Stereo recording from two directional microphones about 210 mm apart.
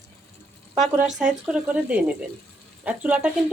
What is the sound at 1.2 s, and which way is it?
Speech, 5° right (ahead or behind).